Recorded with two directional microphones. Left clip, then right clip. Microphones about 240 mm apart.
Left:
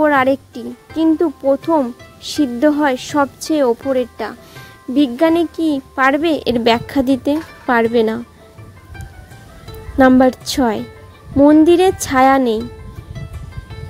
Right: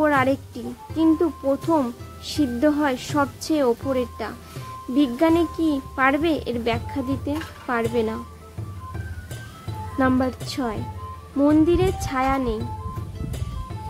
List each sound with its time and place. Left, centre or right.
0.0 s speech: left
9.9 s speech: left